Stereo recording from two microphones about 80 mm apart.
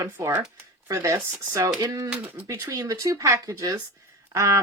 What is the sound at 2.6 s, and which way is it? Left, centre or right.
Speech, right.